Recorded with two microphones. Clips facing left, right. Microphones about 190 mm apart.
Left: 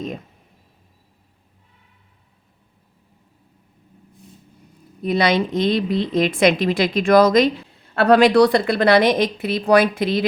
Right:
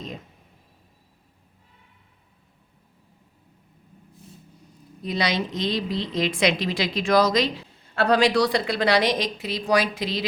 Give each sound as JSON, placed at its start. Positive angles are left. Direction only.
{"t": 5.0, "sound": "a woman's voice", "side_deg": 55}